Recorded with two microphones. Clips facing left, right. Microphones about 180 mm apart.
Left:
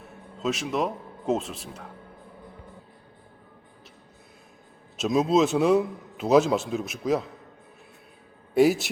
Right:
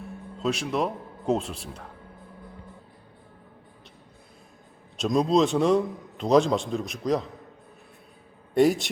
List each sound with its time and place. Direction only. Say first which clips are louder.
0.3 s a man's voice: even; centre (ahead or behind)
4.9 s a man's voice: even; 5° left (ahead or behind)
8.5 s a man's voice: left 1 dB; 5° left (ahead or behind)